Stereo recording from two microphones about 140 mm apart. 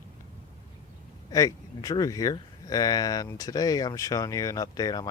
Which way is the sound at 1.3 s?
25° left (ahead or behind).